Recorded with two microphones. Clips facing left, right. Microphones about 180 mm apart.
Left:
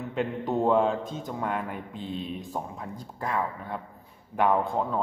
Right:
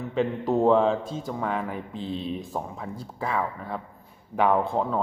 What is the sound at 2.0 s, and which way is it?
Speech, 35° right (ahead or behind).